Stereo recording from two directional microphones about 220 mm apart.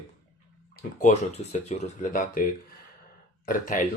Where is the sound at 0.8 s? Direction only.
35° left (ahead or behind).